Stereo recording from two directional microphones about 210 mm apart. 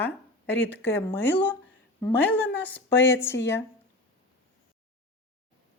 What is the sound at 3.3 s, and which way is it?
Speech, 55° left (ahead or behind).